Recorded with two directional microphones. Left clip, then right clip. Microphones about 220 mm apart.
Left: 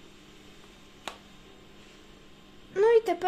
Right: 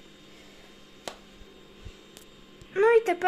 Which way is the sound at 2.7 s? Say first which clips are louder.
Right 1 dB; centre (ahead or behind).